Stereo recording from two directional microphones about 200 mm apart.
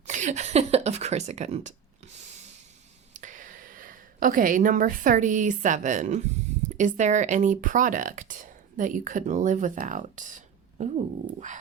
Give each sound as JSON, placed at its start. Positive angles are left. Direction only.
{"t": 0.0, "sound": "speech", "side_deg": -35}
{"t": 3.1, "sound": "a woman's voice", "side_deg": -40}